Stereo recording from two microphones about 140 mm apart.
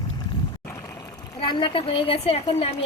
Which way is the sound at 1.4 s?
35° left (ahead or behind).